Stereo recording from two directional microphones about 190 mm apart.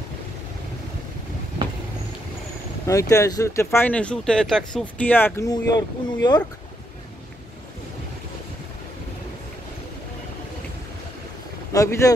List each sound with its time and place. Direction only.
2.9 s speech: 15° left (ahead or behind)
11.7 s speech: 15° left (ahead or behind)